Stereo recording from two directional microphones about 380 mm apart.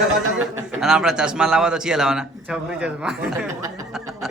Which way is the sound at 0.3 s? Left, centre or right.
Centre.